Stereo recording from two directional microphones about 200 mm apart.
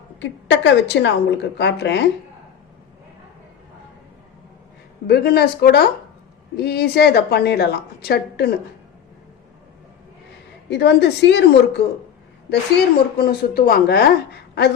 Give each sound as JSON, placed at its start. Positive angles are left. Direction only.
{"t": 0.2, "sound": "a woman's voice", "side_deg": 60}
{"t": 5.0, "sound": "a woman's voice", "side_deg": 50}
{"t": 10.7, "sound": "a woman's voice", "side_deg": 55}
{"t": 13.1, "sound": "a woman's voice", "side_deg": 50}